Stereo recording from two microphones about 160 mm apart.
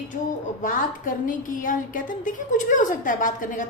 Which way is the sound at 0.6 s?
55° left (ahead or behind).